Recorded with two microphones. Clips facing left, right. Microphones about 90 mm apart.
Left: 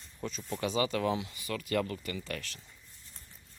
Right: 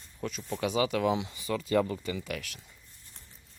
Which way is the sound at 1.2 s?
25° right (ahead or behind).